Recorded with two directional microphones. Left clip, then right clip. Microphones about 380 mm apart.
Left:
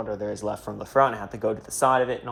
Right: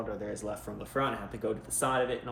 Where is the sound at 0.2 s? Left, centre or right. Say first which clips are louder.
Left 8 dB; centre.